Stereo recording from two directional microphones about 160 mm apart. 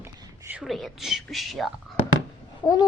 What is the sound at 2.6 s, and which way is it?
Speech, 25° left (ahead or behind).